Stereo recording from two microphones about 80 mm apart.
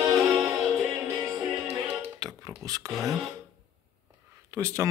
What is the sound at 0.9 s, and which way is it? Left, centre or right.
Music, right.